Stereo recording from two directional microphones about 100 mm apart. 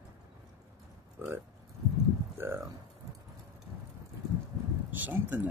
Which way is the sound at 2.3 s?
25° right (ahead or behind).